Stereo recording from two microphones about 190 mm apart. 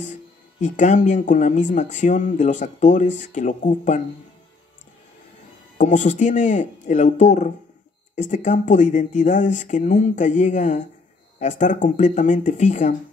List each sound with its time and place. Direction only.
0.0 s speech: 40° left (ahead or behind)
5.8 s speech: 40° left (ahead or behind)